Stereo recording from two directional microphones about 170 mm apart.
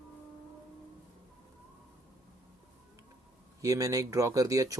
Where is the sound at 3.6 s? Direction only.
20° right (ahead or behind).